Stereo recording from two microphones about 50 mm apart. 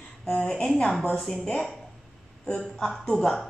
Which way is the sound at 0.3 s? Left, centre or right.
Left.